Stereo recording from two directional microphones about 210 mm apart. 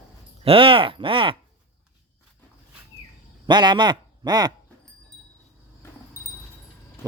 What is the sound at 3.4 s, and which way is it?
Speech, 20° right (ahead or behind).